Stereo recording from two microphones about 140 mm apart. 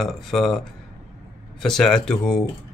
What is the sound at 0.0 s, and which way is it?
Speech, centre (ahead or behind).